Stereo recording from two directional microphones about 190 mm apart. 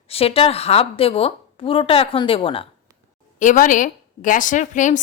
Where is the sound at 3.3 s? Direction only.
45° left (ahead or behind).